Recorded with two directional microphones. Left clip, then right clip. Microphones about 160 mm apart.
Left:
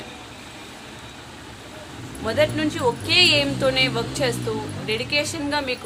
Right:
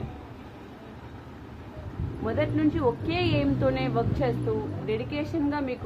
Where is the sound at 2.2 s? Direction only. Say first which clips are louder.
Left 5 dB; 10° right (ahead or behind).